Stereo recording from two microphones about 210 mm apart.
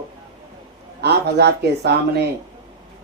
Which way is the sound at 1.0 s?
50° right (ahead or behind).